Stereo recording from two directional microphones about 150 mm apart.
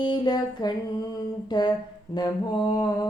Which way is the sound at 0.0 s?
30° left (ahead or behind).